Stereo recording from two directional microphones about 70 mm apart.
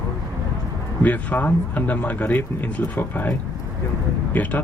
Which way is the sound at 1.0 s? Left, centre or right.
Left.